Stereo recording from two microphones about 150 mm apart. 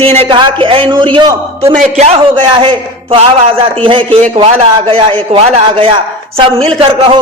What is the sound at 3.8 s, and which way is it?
A man's voice, 35° right (ahead or behind).